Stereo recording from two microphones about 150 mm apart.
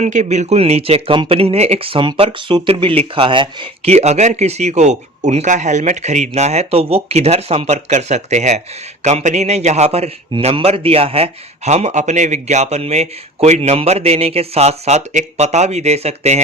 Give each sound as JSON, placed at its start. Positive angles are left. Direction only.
{"t": 0.0, "sound": "speech", "side_deg": -55}
{"t": 3.8, "sound": "a man's voice", "side_deg": -45}